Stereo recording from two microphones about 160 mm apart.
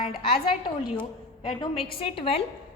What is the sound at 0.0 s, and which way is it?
Cutlery, 35° left (ahead or behind).